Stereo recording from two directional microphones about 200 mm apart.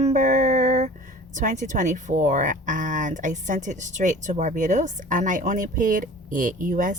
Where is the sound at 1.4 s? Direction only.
40° right (ahead or behind).